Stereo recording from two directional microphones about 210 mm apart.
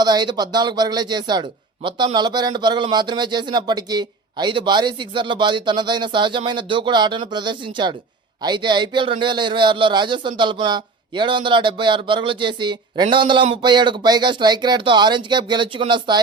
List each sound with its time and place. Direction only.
0.0 s a man's voice: 20° right (ahead or behind)